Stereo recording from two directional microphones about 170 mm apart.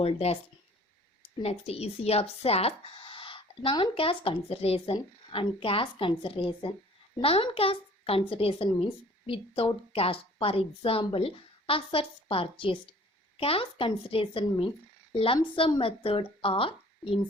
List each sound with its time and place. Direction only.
0.0 s speech: 35° left (ahead or behind)
1.4 s a woman's voice: 35° left (ahead or behind)